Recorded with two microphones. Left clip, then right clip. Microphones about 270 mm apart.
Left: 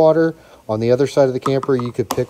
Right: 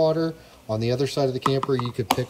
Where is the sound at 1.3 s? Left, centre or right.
Centre.